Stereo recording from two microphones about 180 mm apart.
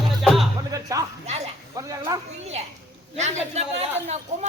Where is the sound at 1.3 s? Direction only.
35° right (ahead or behind).